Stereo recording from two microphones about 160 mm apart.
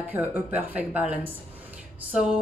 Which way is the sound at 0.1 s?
10° right (ahead or behind).